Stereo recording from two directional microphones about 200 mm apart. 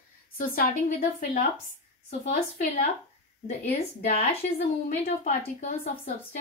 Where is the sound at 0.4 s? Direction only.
45° left (ahead or behind).